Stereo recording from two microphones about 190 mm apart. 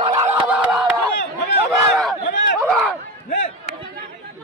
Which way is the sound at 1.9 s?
Centre (ahead or behind).